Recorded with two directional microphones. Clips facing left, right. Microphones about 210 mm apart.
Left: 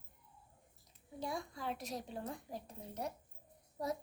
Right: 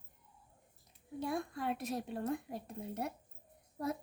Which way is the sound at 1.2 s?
60° right (ahead or behind).